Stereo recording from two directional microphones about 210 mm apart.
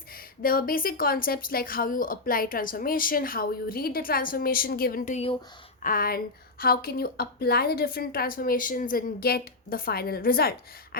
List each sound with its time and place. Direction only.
0.4 s speech: 45° left (ahead or behind)
5.8 s speech: 45° left (ahead or behind)